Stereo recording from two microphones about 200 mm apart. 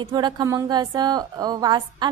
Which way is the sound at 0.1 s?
20° right (ahead or behind).